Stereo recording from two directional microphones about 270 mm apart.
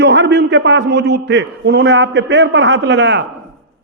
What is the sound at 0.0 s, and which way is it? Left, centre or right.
A man's voice, right.